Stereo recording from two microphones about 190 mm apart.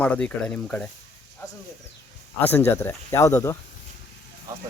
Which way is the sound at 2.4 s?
10° left (ahead or behind).